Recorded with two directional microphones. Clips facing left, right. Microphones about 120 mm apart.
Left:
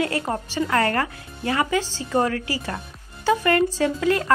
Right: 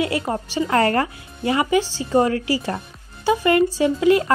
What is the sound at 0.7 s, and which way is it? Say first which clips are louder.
A woman's voice: right 4 dB; 30° right (ahead or behind).